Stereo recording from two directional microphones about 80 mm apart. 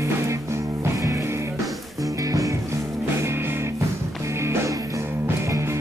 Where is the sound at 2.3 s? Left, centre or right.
Right.